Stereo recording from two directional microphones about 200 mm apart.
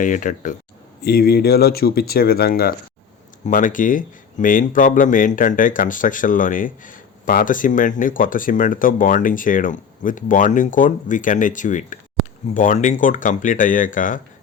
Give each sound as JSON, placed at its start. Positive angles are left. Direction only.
{"t": 0.0, "sound": "speech", "side_deg": 40}
{"t": 1.0, "sound": "speech", "side_deg": 50}